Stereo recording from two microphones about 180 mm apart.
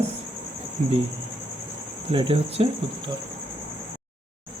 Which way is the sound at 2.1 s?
30° right (ahead or behind).